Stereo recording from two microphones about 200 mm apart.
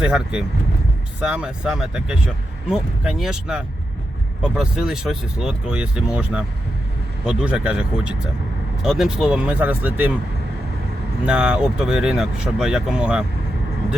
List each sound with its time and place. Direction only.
0.0 s speech: 5° right (ahead or behind)
11.3 s speech: 5° right (ahead or behind)